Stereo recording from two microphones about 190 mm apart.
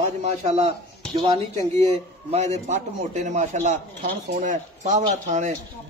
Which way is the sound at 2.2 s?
35° right (ahead or behind).